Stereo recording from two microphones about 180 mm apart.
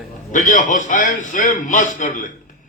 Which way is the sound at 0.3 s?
45° left (ahead or behind).